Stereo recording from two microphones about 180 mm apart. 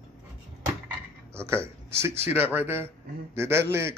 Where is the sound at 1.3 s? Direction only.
15° right (ahead or behind).